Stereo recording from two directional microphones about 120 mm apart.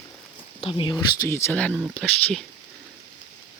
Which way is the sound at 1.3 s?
20° left (ahead or behind).